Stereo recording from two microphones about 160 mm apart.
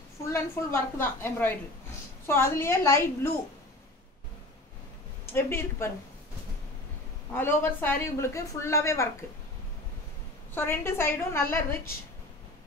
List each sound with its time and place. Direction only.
0.3 s a woman's voice: 15° left (ahead or behind)
5.3 s a woman's voice: 15° left (ahead or behind)
7.3 s a woman's voice: 10° left (ahead or behind)
10.5 s a woman's voice: 15° left (ahead or behind)